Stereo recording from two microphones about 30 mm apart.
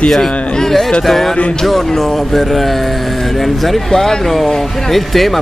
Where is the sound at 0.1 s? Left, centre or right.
Centre.